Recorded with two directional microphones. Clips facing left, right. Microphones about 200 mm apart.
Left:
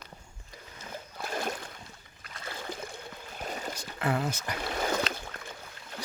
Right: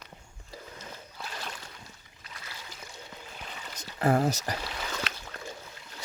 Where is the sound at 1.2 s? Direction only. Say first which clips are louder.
Left 8 dB; 50° left (ahead or behind).